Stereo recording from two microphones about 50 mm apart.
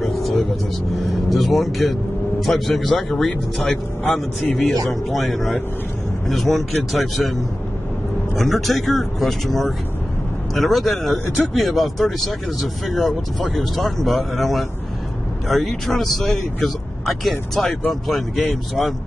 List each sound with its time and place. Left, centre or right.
0.2 s vehicle: centre
1.0 s speech: centre
8.4 s speech: centre
17.3 s speech: centre